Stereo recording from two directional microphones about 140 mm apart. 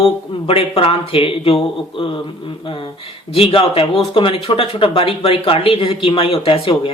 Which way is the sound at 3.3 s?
45° left (ahead or behind).